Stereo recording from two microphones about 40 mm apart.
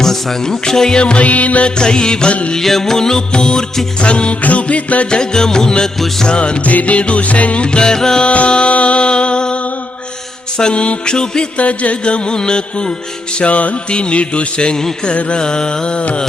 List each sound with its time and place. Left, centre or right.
0.0 s music: centre
0.9 s music: left
1.2 s music: left
1.8 s music: left
2.5 s music: centre; by 5.0 s left
5.1 s music: centre
6.7 s music: left
7.6 s music: left
8.3 s music: left
10.6 s music: left
11.5 s music: left
13.4 s music: left